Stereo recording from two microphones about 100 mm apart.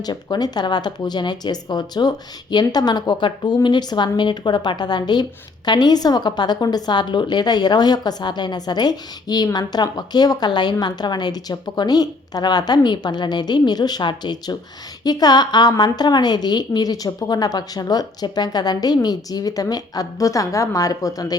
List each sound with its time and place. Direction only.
0.0 s a woman's voice: 45° left (ahead or behind)